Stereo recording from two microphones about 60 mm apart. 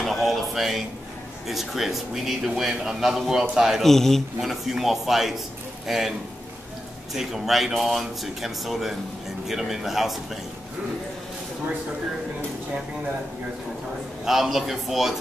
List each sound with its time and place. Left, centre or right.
0.0 s a sound: centre
1.5 s a man's voice: centre
3.8 s speech: centre
7.2 s speech: centre
14.2 s speech: centre